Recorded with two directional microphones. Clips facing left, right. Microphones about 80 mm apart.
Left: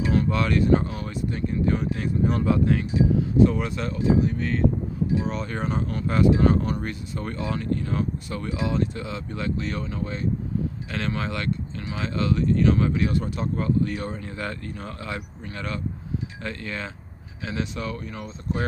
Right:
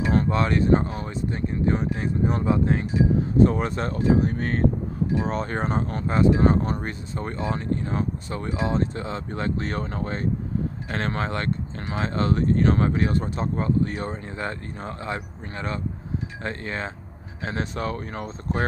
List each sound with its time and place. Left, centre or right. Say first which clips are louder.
0.0 s speech: right 1 dB; right